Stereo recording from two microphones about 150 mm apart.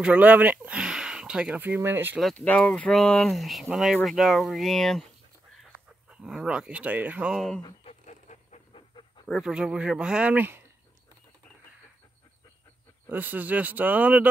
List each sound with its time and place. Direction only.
0.0 s speech: 10° right (ahead or behind)
2.1 s speech: 5° left (ahead or behind)
7.8 s a sound: 50° left (ahead or behind)
8.7 s pant: 35° left (ahead or behind)
9.3 s speech: 5° right (ahead or behind)
13.1 s speech: 10° right (ahead or behind)